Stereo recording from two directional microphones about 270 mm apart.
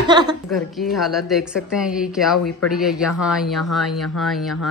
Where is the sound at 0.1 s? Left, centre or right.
Centre.